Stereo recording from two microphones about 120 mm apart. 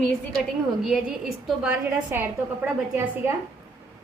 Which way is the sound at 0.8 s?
5° right (ahead or behind).